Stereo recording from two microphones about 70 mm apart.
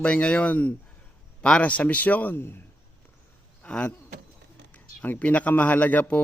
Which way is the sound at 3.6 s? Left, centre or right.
Centre.